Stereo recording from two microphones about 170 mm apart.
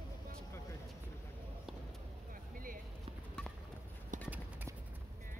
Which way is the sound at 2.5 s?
55° right (ahead or behind).